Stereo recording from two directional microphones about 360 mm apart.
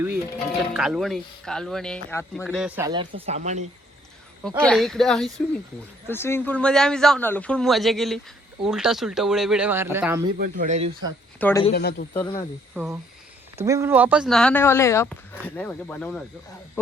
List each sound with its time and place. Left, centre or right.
0.7 s speech: centre
4.4 s speech: centre
10.3 s speech: right
11.3 s speech: centre
11.7 s speech: left
12.1 s speech: centre
12.7 s speech: centre